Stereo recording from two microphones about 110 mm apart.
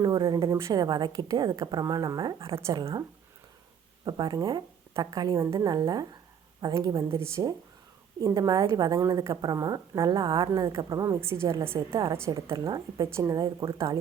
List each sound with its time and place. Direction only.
0.0 s a woman's voice: 40° right (ahead or behind)
4.0 s a woman's voice: 40° right (ahead or behind); by 11.9 s 25° right (ahead or behind)
12.5 s a woman's voice: 35° right (ahead or behind)